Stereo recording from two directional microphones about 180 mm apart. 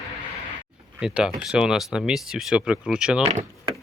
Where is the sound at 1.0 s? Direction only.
5° right (ahead or behind).